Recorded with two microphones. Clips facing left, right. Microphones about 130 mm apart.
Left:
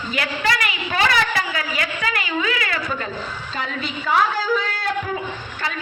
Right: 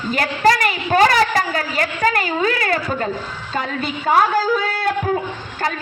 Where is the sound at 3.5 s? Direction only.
45° right (ahead or behind).